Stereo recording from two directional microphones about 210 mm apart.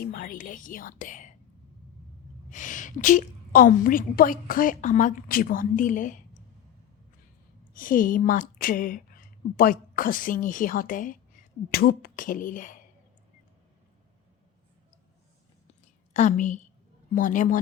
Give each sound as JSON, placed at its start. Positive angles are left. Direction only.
{"t": 0.0, "sound": "a woman's voice", "side_deg": 45}
{"t": 2.5, "sound": "a woman's voice", "side_deg": 35}
{"t": 7.8, "sound": "a woman's voice", "side_deg": 40}
{"t": 16.1, "sound": "a woman's voice", "side_deg": 35}